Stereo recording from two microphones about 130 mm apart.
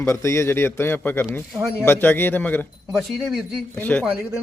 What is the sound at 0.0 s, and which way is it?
Speech, 20° left (ahead or behind).